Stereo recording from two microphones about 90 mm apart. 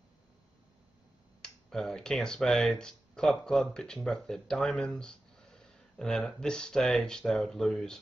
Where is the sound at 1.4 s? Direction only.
5° left (ahead or behind).